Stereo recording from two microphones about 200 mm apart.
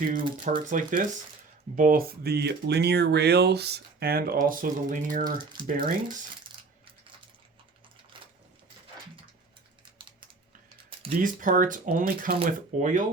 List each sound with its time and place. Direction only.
0.1 s speech: 40° right (ahead or behind)
5.2 s speech: 20° right (ahead or behind)
9.8 s typing: 25° right (ahead or behind)
11.2 s speech: 40° right (ahead or behind)